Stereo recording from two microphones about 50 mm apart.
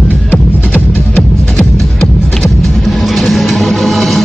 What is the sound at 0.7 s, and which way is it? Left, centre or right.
Music, left.